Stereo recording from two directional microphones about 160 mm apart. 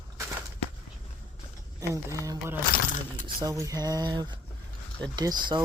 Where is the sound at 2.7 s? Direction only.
55° left (ahead or behind).